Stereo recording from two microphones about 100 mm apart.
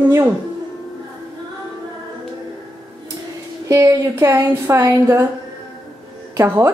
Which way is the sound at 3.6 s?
30° right (ahead or behind).